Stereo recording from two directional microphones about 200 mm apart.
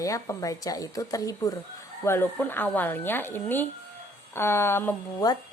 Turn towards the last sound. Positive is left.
turn(degrees=15)  # may be behind; listen again after turning